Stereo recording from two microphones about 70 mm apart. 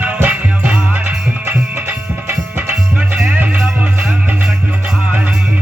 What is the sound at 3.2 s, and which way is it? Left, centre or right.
Music, right.